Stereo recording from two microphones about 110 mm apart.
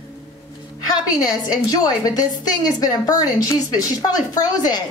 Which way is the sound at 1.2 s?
35° left (ahead or behind).